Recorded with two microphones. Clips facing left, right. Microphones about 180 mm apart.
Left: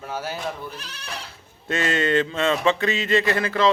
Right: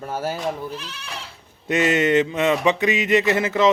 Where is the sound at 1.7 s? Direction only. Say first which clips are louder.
Right 4 dB; 20° right (ahead or behind).